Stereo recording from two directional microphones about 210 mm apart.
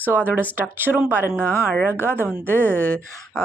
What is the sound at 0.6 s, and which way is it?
Speech, 10° right (ahead or behind).